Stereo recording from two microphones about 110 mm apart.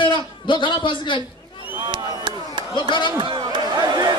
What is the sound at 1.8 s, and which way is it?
Chop, 50° right (ahead or behind).